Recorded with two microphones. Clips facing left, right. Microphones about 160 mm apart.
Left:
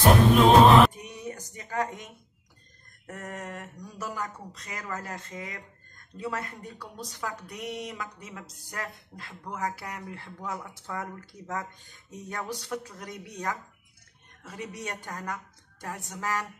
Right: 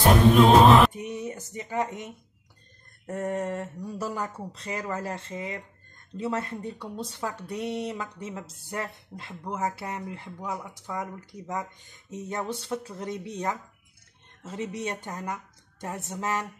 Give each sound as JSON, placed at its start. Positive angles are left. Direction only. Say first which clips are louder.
{"t": 0.9, "sound": "speech", "louder": "right 5 dB", "side_deg": -25}
{"t": 3.1, "sound": "speech", "louder": "right 9 dB", "side_deg": -30}